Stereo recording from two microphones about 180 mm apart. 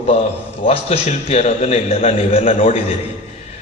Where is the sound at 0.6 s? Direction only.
35° left (ahead or behind).